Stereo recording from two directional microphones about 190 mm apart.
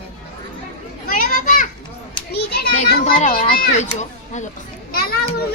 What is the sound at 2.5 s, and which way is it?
Children playing, 55° left (ahead or behind).